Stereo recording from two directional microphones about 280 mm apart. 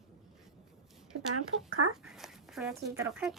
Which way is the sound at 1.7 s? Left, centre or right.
Right.